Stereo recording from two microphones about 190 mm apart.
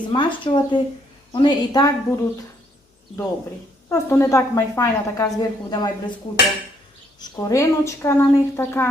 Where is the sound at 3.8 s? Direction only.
15° left (ahead or behind).